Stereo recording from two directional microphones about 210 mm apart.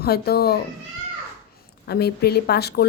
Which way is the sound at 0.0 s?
50° left (ahead or behind).